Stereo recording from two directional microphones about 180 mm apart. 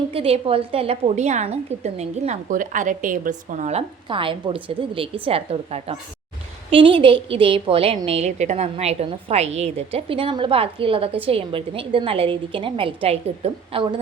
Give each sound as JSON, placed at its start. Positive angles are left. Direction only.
{"t": 0.1, "sound": "a woman's voice", "side_deg": -30}